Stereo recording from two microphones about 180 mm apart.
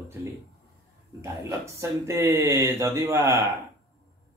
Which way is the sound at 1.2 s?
15° right (ahead or behind).